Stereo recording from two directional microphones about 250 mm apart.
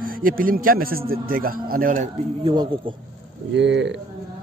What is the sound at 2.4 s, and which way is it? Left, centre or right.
Speech, centre.